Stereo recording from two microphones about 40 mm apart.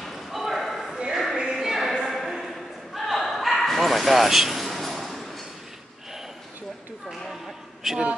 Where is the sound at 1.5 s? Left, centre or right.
Centre.